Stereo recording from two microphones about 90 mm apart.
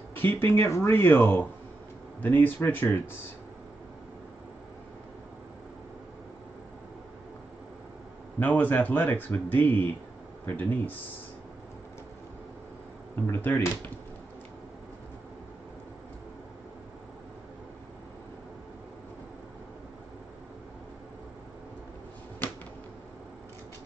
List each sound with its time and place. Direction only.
0.1 s speech: 25° left (ahead or behind)
8.4 s speech: 20° left (ahead or behind)
13.3 s speech: 20° left (ahead or behind)